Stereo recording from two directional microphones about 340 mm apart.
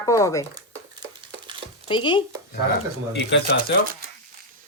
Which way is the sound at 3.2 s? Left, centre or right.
Left.